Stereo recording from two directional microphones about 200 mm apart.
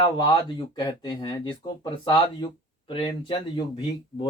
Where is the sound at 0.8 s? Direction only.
20° left (ahead or behind).